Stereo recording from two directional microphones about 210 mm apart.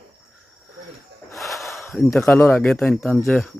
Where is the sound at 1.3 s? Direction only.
Centre (ahead or behind).